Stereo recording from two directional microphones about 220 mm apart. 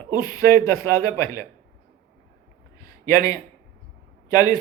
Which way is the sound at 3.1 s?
15° left (ahead or behind).